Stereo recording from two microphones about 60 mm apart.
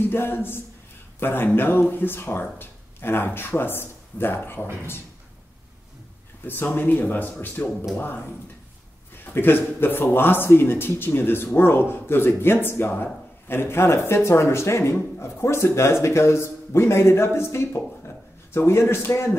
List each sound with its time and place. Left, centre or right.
0.1 s speech: left
6.4 s speech: left
9.2 s speech: left